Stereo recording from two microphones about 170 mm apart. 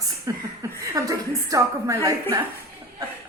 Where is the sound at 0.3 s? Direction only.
20° right (ahead or behind).